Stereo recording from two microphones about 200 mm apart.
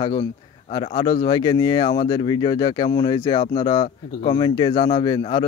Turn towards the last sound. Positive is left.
turn(degrees=25)  # may be behind; listen again after turning